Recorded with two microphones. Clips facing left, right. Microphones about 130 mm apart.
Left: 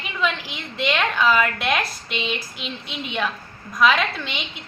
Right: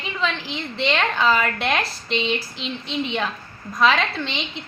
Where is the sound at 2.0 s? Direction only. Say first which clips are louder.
Right 4 dB; 10° left (ahead or behind).